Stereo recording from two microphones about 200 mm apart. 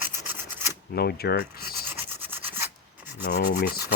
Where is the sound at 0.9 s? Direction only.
50° left (ahead or behind).